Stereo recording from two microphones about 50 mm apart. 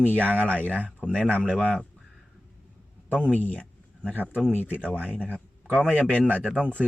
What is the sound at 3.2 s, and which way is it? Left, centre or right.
Speech, left.